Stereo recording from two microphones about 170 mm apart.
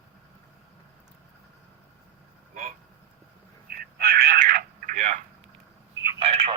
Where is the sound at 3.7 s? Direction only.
60° right (ahead or behind).